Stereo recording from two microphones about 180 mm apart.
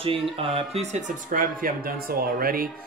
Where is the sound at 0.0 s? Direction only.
30° right (ahead or behind).